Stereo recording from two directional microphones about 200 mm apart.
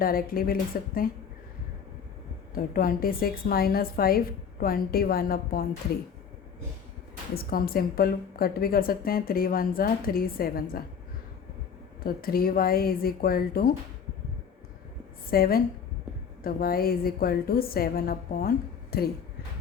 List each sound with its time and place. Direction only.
0.0 s a woman's voice: 45° left (ahead or behind)
2.6 s a woman's voice: 45° left (ahead or behind)
7.3 s a woman's voice: 50° left (ahead or behind)
12.0 s a woman's voice: 50° left (ahead or behind)
15.3 s a woman's voice: 50° left (ahead or behind)